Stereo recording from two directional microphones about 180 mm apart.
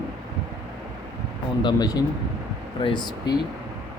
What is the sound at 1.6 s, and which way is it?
Speech, 25° left (ahead or behind).